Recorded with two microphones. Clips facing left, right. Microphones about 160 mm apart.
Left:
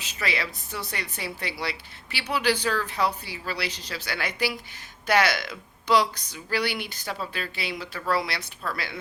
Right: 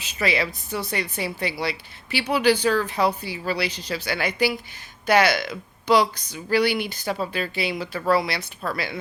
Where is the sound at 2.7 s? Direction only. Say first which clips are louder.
Right 5 dB; 20° right (ahead or behind).